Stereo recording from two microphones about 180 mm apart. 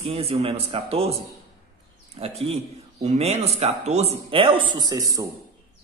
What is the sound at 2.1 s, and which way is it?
A man's voice, 35° right (ahead or behind).